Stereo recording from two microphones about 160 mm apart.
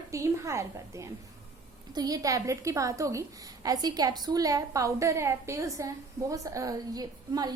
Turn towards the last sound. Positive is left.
turn(degrees=-25)  # may be behind; listen again after turning